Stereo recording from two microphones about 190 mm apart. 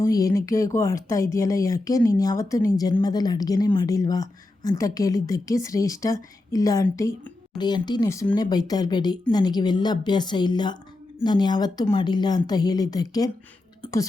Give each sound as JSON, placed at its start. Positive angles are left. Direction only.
{"t": 0.0, "sound": "a woman's voice", "side_deg": 20}